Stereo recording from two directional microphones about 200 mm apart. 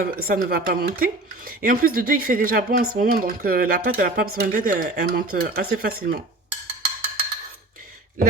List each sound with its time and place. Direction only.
0.0 s speech: 45° right (ahead or behind)